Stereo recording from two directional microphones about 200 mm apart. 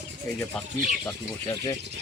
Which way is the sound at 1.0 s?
20° left (ahead or behind).